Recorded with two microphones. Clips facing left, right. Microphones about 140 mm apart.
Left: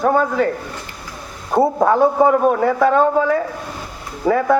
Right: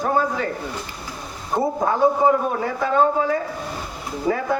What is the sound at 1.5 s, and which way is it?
A man's voice, 60° left (ahead or behind).